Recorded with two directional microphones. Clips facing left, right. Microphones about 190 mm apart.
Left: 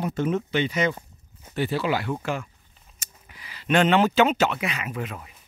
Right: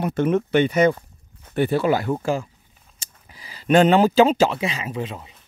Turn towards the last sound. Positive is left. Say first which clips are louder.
# right 4 dB
turn(degrees=-25)  # may be behind; listen again after turning